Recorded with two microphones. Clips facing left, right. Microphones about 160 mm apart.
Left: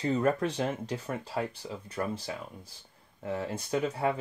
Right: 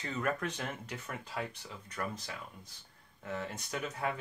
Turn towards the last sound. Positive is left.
turn(degrees=30)  # may be behind; listen again after turning